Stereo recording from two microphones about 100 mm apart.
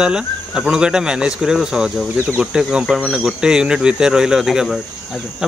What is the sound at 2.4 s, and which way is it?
Speech, 10° right (ahead or behind).